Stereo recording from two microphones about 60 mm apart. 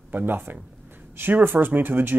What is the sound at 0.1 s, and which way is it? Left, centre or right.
Speech, right.